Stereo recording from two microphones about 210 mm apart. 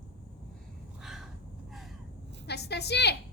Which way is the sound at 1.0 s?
Centre (ahead or behind).